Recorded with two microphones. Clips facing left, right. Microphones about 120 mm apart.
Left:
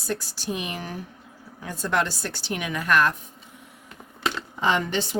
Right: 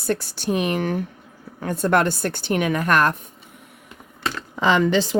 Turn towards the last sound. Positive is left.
turn(degrees=-90)